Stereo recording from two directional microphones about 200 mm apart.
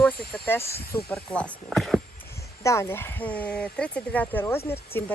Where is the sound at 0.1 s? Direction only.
50° left (ahead or behind).